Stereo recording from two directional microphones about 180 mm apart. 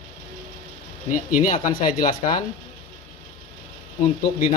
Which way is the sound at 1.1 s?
45° left (ahead or behind).